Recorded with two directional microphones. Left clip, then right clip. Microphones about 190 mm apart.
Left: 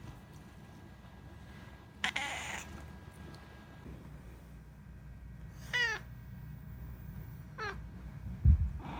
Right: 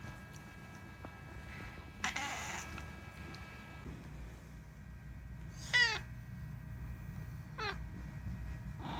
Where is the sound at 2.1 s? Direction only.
35° left (ahead or behind).